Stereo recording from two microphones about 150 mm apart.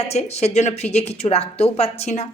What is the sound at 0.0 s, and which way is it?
A woman's voice, 45° left (ahead or behind).